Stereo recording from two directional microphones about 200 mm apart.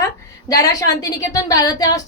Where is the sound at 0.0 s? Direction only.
15° left (ahead or behind).